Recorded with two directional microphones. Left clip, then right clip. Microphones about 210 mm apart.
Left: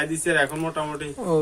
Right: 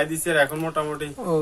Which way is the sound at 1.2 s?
10° left (ahead or behind).